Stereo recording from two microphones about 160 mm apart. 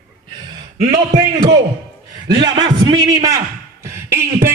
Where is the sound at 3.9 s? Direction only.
20° right (ahead or behind).